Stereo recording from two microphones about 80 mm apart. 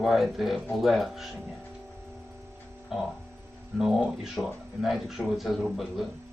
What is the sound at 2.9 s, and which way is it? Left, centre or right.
A man's voice, centre.